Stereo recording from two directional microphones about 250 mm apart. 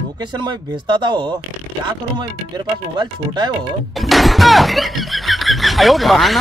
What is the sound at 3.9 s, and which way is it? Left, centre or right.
Speech, centre.